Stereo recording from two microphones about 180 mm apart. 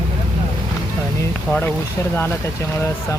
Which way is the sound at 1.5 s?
10° left (ahead or behind).